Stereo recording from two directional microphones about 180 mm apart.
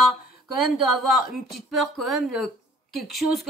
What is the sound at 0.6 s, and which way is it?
A woman's voice, centre (ahead or behind).